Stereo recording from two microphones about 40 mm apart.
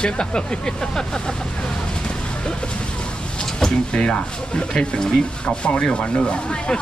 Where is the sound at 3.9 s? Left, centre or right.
Left.